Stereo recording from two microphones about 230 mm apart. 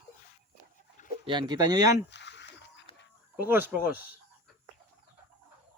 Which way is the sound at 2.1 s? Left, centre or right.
Left.